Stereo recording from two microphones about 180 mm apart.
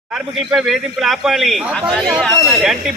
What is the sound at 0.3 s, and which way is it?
A man's voice, centre (ahead or behind).